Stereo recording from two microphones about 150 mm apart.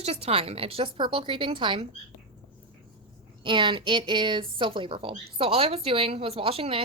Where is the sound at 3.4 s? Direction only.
35° right (ahead or behind).